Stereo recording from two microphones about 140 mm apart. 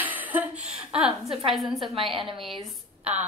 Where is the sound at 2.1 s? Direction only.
35° right (ahead or behind).